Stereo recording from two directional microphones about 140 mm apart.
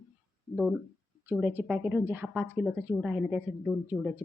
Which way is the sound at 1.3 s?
15° right (ahead or behind).